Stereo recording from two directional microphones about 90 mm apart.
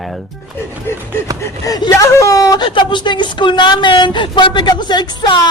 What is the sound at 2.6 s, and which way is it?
Speech, 60° left (ahead or behind).